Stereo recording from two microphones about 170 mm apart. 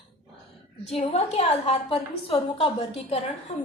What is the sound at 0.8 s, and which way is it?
A woman's voice, 35° left (ahead or behind).